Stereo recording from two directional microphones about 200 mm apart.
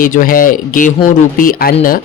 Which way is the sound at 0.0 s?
45° left (ahead or behind).